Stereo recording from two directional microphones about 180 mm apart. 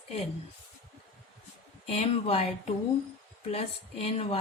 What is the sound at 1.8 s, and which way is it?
A woman's voice, 35° left (ahead or behind).